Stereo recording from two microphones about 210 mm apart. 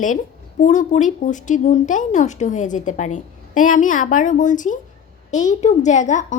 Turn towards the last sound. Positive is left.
turn(degrees=35)  # may be behind; listen again after turning